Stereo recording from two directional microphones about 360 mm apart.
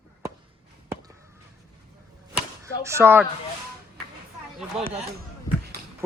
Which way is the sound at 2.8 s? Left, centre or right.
Centre.